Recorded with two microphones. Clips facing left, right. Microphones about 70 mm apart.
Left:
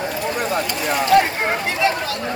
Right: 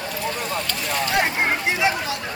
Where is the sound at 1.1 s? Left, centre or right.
Centre.